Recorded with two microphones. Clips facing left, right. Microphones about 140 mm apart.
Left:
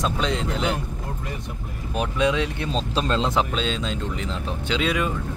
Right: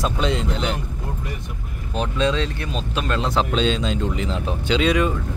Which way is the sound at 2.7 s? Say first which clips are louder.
Left 2 dB; 30° left (ahead or behind).